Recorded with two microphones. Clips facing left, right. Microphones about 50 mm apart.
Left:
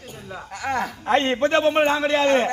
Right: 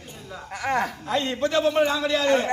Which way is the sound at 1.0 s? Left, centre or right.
Left.